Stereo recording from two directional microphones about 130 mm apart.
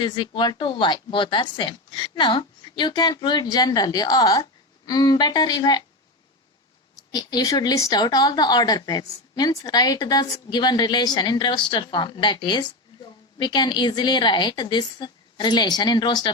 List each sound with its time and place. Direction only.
0.0 s speech: 35° left (ahead or behind)
7.1 s speech: 30° left (ahead or behind)